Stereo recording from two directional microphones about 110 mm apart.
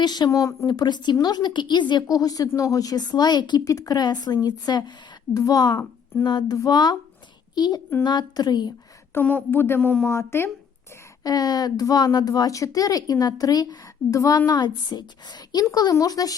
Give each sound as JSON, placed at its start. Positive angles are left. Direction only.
{"t": 0.0, "sound": "speech", "side_deg": 40}
{"t": 0.7, "sound": "a woman's voice", "side_deg": 40}
{"t": 3.6, "sound": "a woman's voice", "side_deg": 30}
{"t": 9.1, "sound": "speech", "side_deg": 15}
{"t": 11.2, "sound": "a woman's voice", "side_deg": 35}